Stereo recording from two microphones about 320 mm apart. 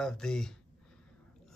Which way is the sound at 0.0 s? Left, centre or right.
Centre.